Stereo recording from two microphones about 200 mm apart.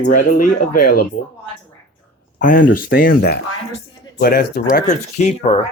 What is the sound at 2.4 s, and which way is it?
Speech, 40° left (ahead or behind).